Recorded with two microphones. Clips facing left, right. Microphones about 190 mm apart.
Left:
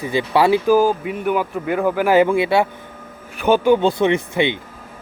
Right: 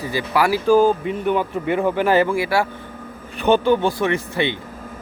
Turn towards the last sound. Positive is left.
turn(degrees=20)  # may be behind; listen again after turning